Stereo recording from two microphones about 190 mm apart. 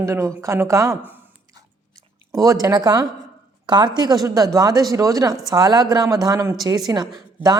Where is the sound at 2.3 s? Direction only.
20° right (ahead or behind).